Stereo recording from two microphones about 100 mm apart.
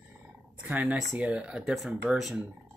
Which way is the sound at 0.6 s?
15° right (ahead or behind).